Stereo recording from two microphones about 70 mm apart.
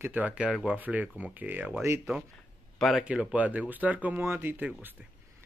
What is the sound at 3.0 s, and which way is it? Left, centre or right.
Speech, centre.